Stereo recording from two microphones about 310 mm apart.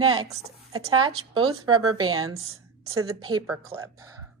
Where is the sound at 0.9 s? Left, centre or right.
Centre.